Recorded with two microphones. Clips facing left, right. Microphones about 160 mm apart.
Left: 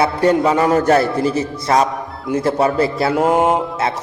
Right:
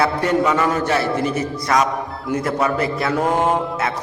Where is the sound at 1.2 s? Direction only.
30° left (ahead or behind).